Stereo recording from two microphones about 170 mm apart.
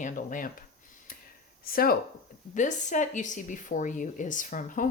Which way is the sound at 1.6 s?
60° left (ahead or behind).